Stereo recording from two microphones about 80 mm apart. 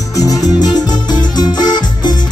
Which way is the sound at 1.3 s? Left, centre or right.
Left.